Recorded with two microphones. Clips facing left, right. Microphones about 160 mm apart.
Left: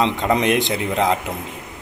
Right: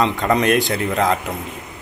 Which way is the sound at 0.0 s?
20° left (ahead or behind).